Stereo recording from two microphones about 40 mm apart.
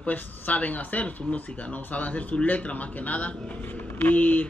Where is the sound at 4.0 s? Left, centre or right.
Left.